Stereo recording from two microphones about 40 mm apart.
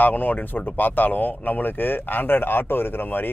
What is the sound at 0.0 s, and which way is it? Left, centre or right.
Speech, left.